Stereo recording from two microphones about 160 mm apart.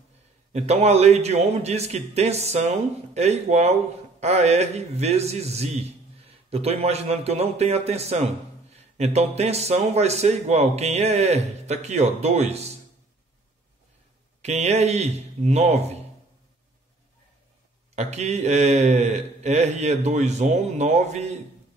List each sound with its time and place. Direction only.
0.5 s a man's voice: 45° right (ahead or behind)
14.4 s speech: 45° right (ahead or behind)
17.9 s speech: 45° right (ahead or behind)